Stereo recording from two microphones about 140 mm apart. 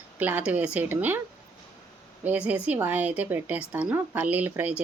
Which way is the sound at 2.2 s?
10° right (ahead or behind).